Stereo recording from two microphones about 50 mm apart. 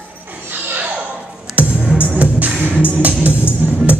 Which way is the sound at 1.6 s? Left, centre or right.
Right.